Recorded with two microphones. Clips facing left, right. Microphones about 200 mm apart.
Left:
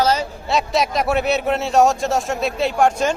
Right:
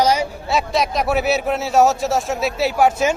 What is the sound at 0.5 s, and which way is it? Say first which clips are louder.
A man's voice: left 1 dB; centre (ahead or behind).